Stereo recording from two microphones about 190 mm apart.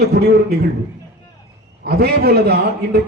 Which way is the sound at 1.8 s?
55° right (ahead or behind).